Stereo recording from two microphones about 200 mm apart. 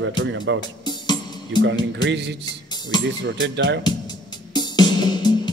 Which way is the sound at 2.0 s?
60° right (ahead or behind).